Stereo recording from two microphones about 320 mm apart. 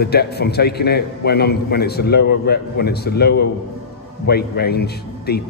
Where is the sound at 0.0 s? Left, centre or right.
Left.